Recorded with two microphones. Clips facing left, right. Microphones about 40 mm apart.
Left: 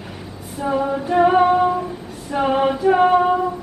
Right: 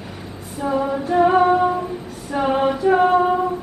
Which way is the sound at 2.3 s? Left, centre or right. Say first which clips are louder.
Left 1 dB; centre.